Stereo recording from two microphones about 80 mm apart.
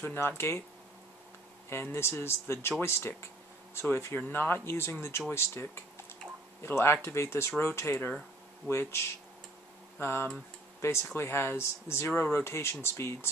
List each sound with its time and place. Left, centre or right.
0.0 s speech: left
1.7 s speech: left